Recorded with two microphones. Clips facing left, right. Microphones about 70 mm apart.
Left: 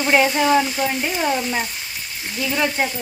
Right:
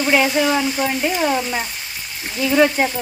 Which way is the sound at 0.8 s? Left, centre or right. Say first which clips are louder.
Right 2 dB; centre.